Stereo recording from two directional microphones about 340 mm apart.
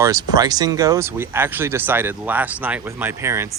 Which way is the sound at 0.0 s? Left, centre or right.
Centre.